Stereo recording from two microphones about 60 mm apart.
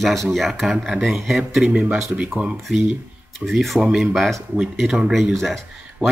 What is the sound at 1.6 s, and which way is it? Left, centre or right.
Speech, right.